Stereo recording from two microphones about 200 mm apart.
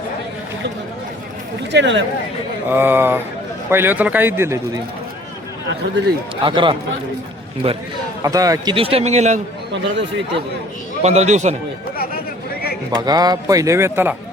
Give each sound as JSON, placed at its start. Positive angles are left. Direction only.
{"t": 1.7, "sound": "speech", "side_deg": -65}
{"t": 2.6, "sound": "a man's voice", "side_deg": -10}
{"t": 5.8, "sound": "speech", "side_deg": -55}
{"t": 6.4, "sound": "a man's voice", "side_deg": -25}
{"t": 8.2, "sound": "a man's voice", "side_deg": -15}
{"t": 9.7, "sound": "speech", "side_deg": -60}
{"t": 11.0, "sound": "a man's voice", "side_deg": -35}
{"t": 13.1, "sound": "a man's voice", "side_deg": -20}